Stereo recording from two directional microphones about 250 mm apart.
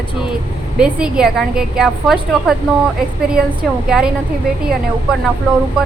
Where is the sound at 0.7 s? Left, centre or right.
Centre.